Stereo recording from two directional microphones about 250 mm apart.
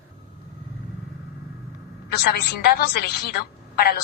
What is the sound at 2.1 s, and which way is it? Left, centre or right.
A woman's voice, left.